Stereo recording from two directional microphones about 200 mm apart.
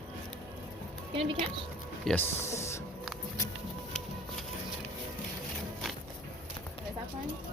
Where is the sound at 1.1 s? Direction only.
30° right (ahead or behind).